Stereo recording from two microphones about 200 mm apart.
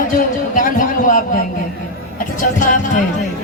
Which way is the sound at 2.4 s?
40° left (ahead or behind).